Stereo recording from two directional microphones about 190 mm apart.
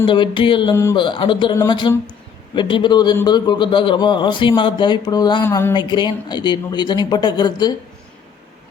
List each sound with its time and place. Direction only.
0.0 s a man's voice: 25° left (ahead or behind)
0.8 s speech: 15° left (ahead or behind)
1.0 s a man's voice: 25° left (ahead or behind)